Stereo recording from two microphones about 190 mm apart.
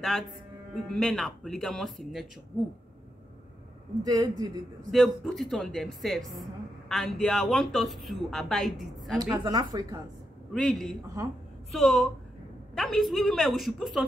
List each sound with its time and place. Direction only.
0.7 s speech: centre (ahead or behind)
4.0 s a woman's voice: 20° right (ahead or behind)
4.9 s speech: centre (ahead or behind)
9.2 s a woman's voice: 20° right (ahead or behind)
10.5 s speech: centre (ahead or behind)